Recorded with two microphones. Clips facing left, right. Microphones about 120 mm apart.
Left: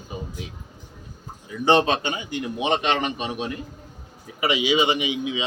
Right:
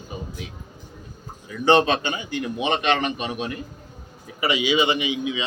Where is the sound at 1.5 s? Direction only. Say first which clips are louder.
Right 1 dB; 15° left (ahead or behind).